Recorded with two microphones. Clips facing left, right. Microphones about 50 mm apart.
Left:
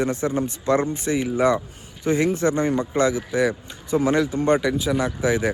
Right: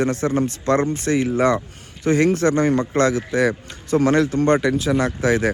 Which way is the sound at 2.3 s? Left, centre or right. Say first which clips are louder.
Right 3 dB; right.